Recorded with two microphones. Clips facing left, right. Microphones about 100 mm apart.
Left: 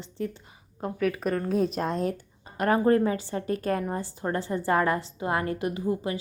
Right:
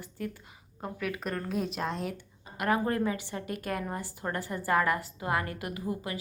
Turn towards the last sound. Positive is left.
turn(degrees=25)  # may be behind; listen again after turning